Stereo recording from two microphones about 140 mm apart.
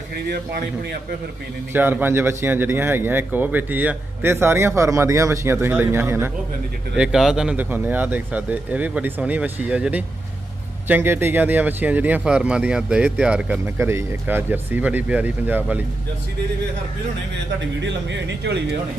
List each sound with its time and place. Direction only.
1.7 s a man's voice: 15° right (ahead or behind)
6.9 s a man's voice: 5° right (ahead or behind)
13.7 s a man's voice: 20° right (ahead or behind)